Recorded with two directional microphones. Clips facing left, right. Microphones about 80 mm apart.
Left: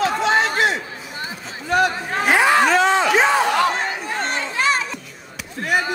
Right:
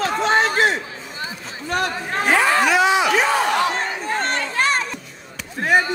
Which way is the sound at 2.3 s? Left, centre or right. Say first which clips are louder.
Left 2 dB; centre.